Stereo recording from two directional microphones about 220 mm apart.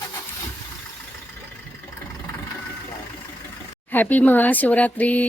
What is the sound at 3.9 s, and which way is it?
Speech, 10° left (ahead or behind).